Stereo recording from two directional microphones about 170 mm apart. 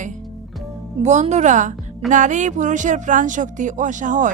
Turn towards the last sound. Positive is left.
turn(degrees=-50)  # may be behind; listen again after turning